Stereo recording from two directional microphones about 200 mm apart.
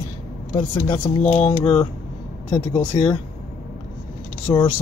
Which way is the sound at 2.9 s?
20° left (ahead or behind).